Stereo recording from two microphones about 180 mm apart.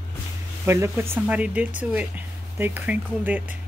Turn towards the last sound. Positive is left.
turn(degrees=-10)  # may be behind; listen again after turning